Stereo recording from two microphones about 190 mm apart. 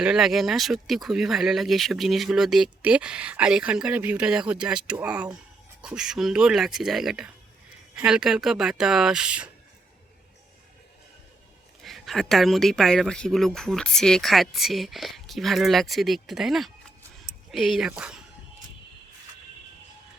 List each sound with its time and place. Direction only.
0.0 s speech: 5° right (ahead or behind)
11.8 s speech: centre (ahead or behind)